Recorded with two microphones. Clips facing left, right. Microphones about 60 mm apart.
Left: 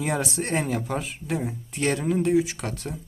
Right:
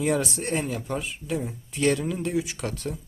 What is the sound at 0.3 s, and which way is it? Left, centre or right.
Speech, left.